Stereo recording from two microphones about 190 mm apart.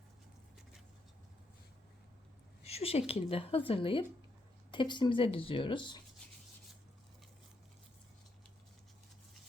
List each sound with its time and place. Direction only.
2.6 s speech: 30° left (ahead or behind)